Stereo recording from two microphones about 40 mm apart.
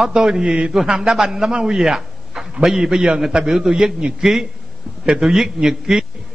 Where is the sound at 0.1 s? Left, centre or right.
Right.